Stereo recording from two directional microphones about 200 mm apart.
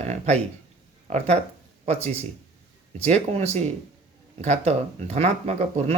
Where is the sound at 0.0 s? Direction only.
35° right (ahead or behind).